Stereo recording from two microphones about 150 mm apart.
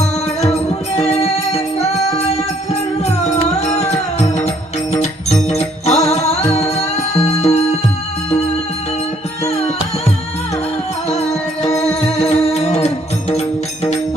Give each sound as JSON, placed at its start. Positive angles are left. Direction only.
{"t": 0.9, "sound": "music", "side_deg": 45}
{"t": 3.8, "sound": "music", "side_deg": 45}
{"t": 11.1, "sound": "music", "side_deg": 45}